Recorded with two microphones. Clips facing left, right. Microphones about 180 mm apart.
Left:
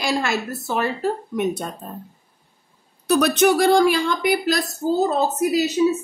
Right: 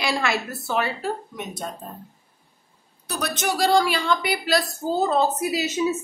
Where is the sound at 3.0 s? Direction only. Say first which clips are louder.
Left 11 dB; 65° left (ahead or behind).